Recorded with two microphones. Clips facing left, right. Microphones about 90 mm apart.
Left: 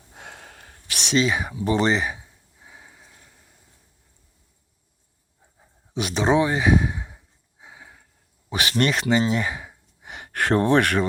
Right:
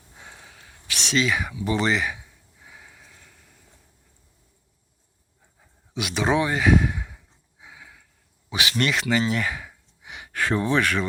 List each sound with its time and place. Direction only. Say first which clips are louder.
0.1 s a sound: left 4 dB; 60° left (ahead or behind); by 3.4 s 25° left (ahead or behind)
5.9 s speech: left 2 dB; 35° left (ahead or behind)
6.2 s speech: left 2 dB; 25° left (ahead or behind)
7.6 s a sound: left 1 dB; 30° left (ahead or behind)
8.4 s speech: left 2 dB; 40° left (ahead or behind); by 9.7 s 25° left (ahead or behind)
10.0 s gasp: left 2 dB; 45° left (ahead or behind)